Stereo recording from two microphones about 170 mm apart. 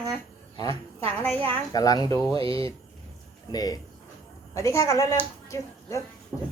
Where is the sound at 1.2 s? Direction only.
10° left (ahead or behind).